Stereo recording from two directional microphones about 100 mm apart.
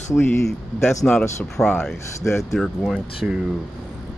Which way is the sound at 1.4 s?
Centre (ahead or behind).